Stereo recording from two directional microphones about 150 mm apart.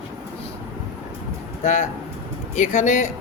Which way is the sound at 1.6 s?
50° left (ahead or behind).